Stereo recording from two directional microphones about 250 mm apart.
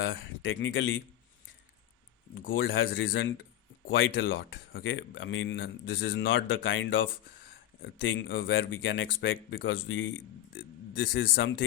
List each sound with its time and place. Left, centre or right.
0.6 s speech: left
2.5 s speech: left